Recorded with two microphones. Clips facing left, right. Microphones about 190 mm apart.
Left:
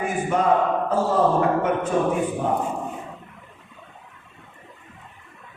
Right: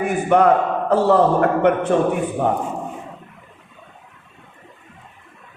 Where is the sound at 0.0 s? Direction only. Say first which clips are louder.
Right 6 dB; 65° right (ahead or behind).